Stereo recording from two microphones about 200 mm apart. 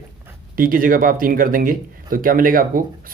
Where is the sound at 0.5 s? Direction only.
45° right (ahead or behind).